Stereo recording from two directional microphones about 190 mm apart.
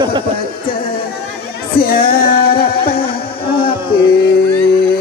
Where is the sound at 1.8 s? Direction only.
50° left (ahead or behind).